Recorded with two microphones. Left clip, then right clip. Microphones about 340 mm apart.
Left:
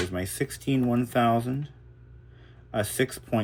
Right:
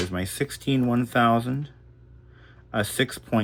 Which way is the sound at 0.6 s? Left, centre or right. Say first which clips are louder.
Right 1 dB; right.